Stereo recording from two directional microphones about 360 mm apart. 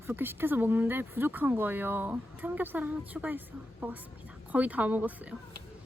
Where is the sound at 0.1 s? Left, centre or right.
Centre.